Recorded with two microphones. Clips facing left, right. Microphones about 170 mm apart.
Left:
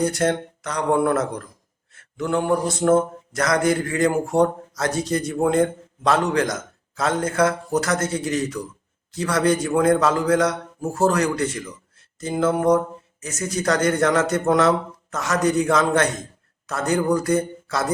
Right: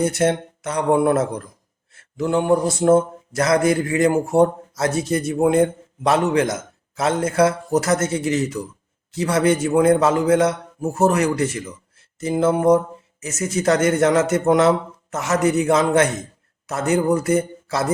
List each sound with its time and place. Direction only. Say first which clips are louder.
0.0 s speech: right 2 dB; 25° right (ahead or behind)